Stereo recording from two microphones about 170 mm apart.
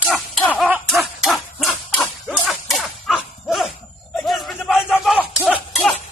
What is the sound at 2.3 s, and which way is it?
Dog, centre (ahead or behind).